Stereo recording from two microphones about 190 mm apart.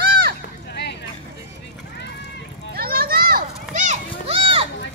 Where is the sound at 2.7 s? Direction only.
50° right (ahead or behind); by 4.7 s 30° right (ahead or behind).